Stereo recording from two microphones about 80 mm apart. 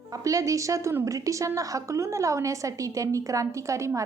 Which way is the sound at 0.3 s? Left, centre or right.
Right.